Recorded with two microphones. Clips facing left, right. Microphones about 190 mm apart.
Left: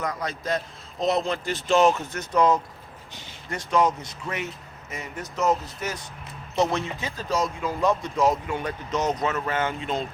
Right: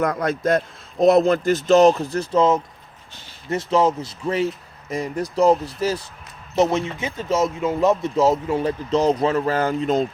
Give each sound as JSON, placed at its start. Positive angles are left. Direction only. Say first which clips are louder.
{"t": 0.0, "sound": "a man's voice", "louder": "right 9 dB", "side_deg": -55}
{"t": 3.7, "sound": "speech", "louder": "right 3 dB", "side_deg": -25}
{"t": 6.6, "sound": "speech", "louder": "right 5 dB", "side_deg": -20}